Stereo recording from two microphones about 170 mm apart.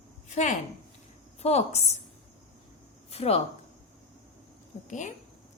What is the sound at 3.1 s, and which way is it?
Speech, 35° left (ahead or behind).